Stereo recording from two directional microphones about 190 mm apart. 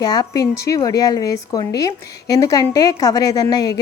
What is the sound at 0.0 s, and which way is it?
A woman's voice, 20° left (ahead or behind).